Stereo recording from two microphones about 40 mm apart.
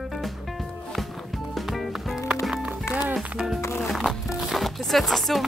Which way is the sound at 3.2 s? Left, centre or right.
Centre.